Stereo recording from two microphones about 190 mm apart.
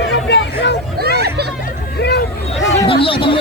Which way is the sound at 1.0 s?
55° right (ahead or behind).